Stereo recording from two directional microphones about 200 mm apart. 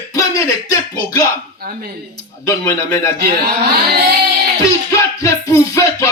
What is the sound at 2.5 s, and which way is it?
Speech, 15° left (ahead or behind).